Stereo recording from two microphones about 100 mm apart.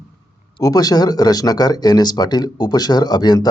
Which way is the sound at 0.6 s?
40° left (ahead or behind).